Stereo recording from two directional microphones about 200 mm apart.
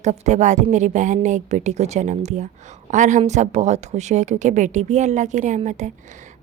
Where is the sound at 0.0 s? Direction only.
35° right (ahead or behind).